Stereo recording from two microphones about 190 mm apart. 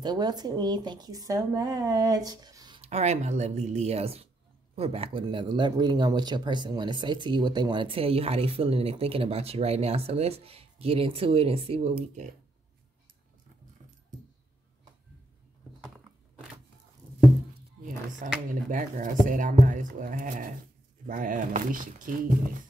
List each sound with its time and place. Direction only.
0.0 s speech: 20° right (ahead or behind)
2.8 s speech: 35° right (ahead or behind)
18.2 s speech: 45° right (ahead or behind)